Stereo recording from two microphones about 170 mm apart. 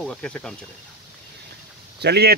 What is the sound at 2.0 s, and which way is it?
Speech, 75° right (ahead or behind).